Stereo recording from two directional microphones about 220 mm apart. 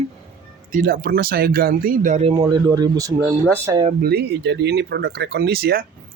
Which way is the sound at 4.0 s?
45° right (ahead or behind).